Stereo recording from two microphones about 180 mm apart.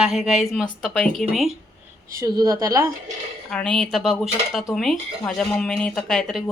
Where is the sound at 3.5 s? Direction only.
5° left (ahead or behind).